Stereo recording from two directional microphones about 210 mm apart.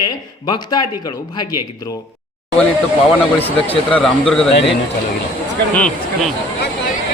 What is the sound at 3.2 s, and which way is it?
Speech, 10° left (ahead or behind).